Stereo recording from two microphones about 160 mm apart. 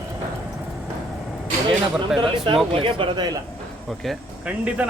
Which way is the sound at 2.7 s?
35° right (ahead or behind).